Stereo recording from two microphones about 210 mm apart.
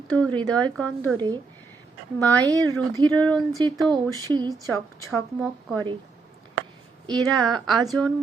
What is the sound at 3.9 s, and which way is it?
Speech, 20° right (ahead or behind).